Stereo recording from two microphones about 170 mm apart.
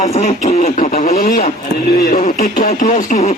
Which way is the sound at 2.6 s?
45° left (ahead or behind).